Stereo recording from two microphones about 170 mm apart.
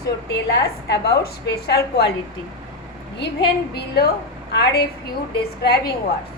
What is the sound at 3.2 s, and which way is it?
A woman's voice, 75° left (ahead or behind).